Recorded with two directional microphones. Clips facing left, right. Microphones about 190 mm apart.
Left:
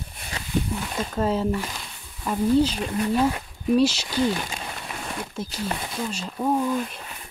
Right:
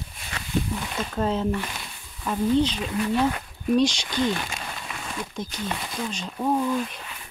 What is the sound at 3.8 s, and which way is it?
Speech, 5° left (ahead or behind).